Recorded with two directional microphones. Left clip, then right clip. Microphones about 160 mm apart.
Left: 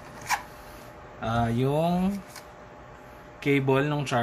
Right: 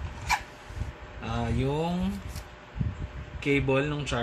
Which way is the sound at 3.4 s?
50° left (ahead or behind).